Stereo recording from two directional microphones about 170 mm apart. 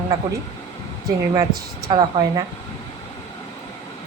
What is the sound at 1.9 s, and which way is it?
Speech, 25° right (ahead or behind).